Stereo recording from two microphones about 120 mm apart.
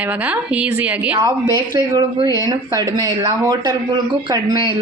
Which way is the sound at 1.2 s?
30° right (ahead or behind).